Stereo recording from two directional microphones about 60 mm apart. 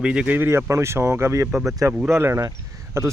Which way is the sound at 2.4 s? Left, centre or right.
Right.